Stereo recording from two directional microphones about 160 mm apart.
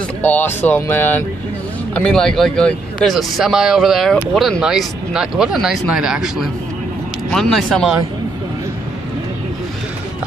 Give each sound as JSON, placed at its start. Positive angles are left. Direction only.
{"t": 0.2, "sound": "speech", "side_deg": 10}